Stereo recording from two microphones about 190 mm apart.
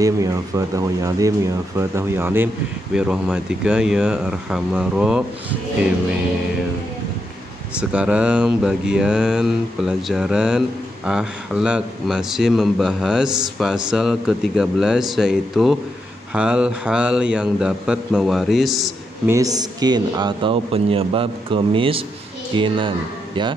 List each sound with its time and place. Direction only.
0.0 s speech: 15° right (ahead or behind)
7.9 s speech: 5° right (ahead or behind)
19.2 s speech: 15° right (ahead or behind)